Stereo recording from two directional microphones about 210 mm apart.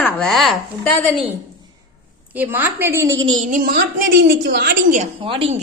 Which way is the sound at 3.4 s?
40° right (ahead or behind).